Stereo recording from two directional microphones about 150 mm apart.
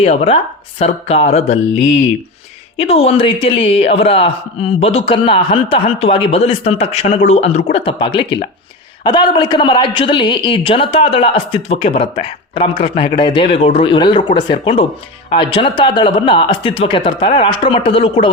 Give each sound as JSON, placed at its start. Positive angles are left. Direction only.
{"t": 0.0, "sound": "speech", "side_deg": 40}
{"t": 2.7, "sound": "speech", "side_deg": 45}